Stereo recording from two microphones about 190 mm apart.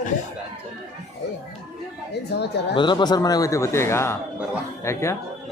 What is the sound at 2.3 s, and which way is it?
Speech, 60° left (ahead or behind).